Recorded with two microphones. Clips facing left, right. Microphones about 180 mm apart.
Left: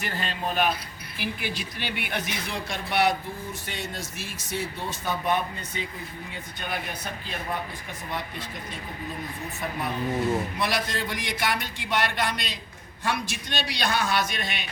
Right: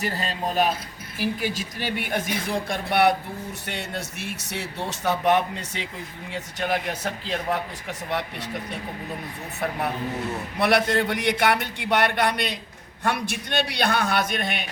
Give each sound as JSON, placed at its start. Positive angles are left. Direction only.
{"t": 0.0, "sound": "speech", "side_deg": -35}
{"t": 10.6, "sound": "a man's voice", "side_deg": -65}